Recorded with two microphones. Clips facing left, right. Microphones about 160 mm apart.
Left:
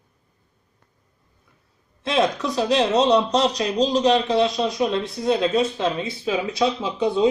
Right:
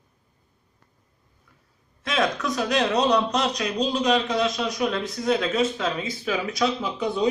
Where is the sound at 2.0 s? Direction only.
25° left (ahead or behind).